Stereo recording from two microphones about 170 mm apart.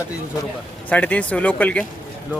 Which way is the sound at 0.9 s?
10° left (ahead or behind).